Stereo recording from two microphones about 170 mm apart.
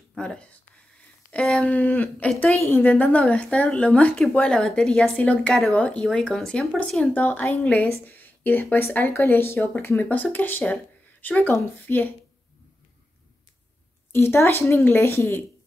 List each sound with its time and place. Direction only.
0.1 s a woman's voice: 5° left (ahead or behind)
14.1 s a woman's voice: 15° left (ahead or behind)